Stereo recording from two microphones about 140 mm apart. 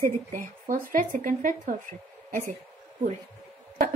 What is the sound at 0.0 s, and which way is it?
Speech, 70° right (ahead or behind).